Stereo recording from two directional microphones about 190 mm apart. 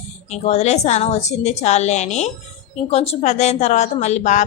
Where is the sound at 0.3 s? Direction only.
35° left (ahead or behind).